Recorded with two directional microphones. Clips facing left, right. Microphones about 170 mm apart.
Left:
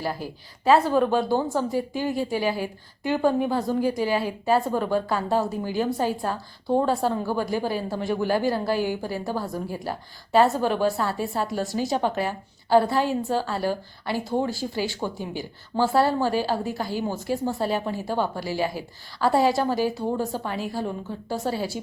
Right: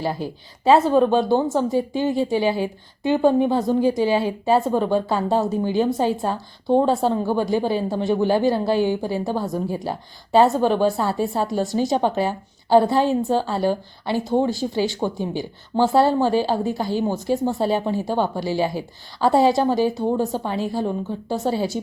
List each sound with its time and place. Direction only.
0.0 s a woman's voice: 25° right (ahead or behind)